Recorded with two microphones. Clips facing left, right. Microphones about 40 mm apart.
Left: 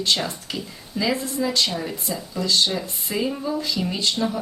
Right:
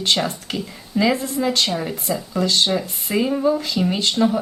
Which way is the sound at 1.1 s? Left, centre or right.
Right.